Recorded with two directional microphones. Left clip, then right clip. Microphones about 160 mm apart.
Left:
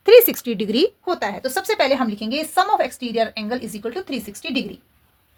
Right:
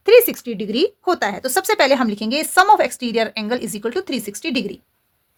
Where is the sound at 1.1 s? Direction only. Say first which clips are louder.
Right 3 dB; 50° right (ahead or behind); by 4.6 s 80° right.